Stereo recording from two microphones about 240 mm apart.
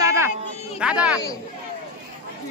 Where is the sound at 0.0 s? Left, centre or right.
Centre.